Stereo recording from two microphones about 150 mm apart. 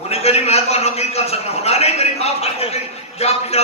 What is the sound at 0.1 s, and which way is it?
A man's voice, 45° left (ahead or behind).